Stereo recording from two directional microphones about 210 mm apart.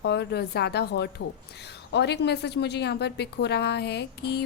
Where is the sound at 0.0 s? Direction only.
55° left (ahead or behind).